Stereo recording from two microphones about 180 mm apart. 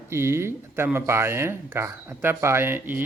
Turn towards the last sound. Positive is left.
turn(degrees=-10)  # may be behind; listen again after turning